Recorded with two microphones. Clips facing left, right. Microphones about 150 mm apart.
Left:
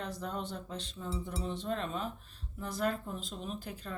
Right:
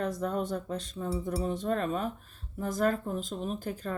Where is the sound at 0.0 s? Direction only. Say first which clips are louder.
Right 8 dB; 50° right (ahead or behind).